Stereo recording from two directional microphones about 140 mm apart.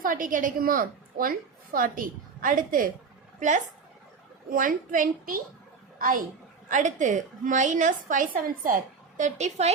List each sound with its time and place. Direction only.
0.0 s a woman's voice: 70° right (ahead or behind)
4.4 s a woman's voice: 75° right (ahead or behind)
6.7 s a woman's voice: 60° right (ahead or behind)